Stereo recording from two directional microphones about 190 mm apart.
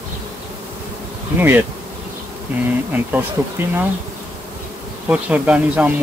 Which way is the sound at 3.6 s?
10° right (ahead or behind).